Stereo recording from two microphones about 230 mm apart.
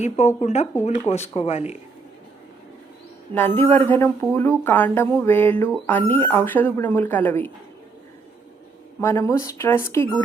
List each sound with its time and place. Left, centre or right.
0.0 s speech: left
3.3 s speech: centre
9.0 s speech: centre